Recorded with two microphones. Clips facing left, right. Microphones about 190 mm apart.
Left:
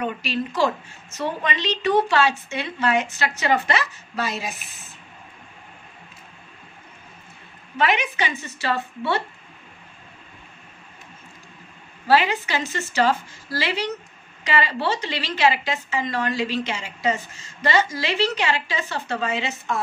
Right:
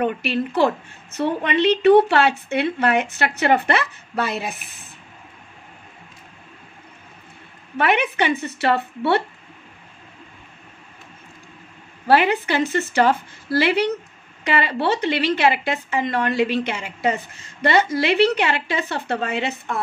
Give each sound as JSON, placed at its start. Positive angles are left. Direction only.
{"t": 0.0, "sound": "a woman's voice", "side_deg": -60}
{"t": 7.7, "sound": "a woman's voice", "side_deg": -60}
{"t": 12.1, "sound": "a woman's voice", "side_deg": -55}